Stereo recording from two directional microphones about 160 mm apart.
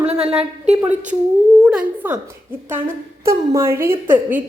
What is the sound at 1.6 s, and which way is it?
A woman's voice, 10° right (ahead or behind).